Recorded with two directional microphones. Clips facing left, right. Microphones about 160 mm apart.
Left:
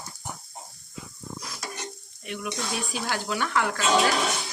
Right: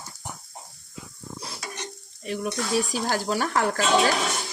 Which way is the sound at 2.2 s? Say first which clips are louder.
Right 4 dB; 35° right (ahead or behind).